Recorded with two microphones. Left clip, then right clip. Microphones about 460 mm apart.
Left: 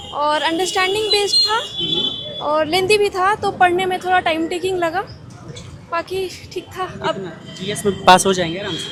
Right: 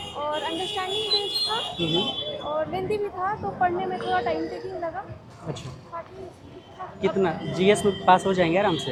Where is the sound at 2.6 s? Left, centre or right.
Left.